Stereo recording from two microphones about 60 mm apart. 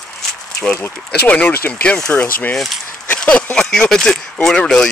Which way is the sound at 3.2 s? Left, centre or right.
Centre.